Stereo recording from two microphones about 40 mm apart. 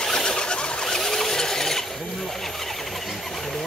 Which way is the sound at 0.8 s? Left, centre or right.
Centre.